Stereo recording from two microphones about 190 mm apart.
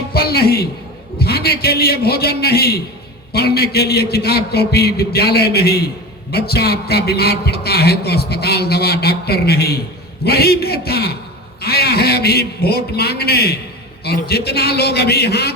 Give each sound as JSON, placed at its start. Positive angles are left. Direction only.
{"t": 0.1, "sound": "a man's voice", "side_deg": 55}